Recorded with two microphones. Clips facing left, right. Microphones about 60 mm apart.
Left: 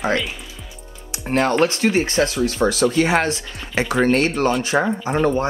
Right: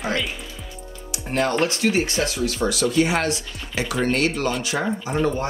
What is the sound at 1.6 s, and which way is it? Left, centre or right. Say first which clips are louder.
Speech: left 3 dB; left.